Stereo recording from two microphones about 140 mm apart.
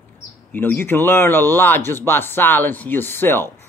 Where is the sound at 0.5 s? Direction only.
15° left (ahead or behind).